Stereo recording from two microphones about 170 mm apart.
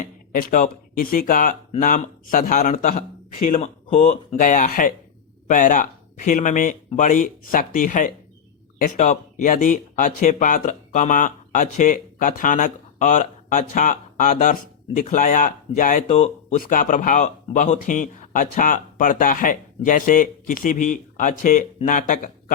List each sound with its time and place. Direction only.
0.0 s speech: 55° left (ahead or behind)
3.6 s speech: 40° left (ahead or behind)